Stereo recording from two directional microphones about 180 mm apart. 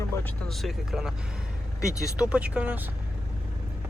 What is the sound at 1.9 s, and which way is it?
Speech, 15° left (ahead or behind).